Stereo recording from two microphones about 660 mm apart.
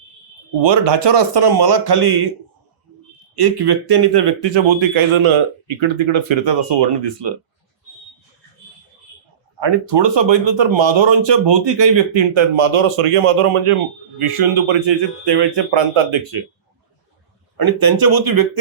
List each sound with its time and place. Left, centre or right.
0.6 s speech: right
3.3 s speech: right
9.6 s speech: right
17.6 s speech: right